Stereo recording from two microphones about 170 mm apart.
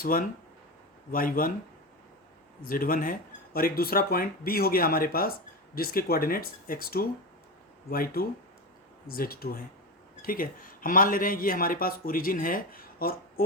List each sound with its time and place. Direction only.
0.0 s speech: 55° left (ahead or behind)
2.6 s speech: 55° left (ahead or behind)